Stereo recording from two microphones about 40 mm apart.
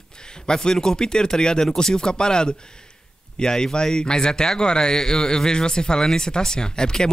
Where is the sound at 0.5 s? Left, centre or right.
Centre.